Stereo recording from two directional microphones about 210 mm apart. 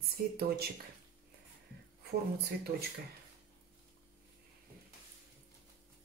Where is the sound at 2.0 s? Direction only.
50° right (ahead or behind).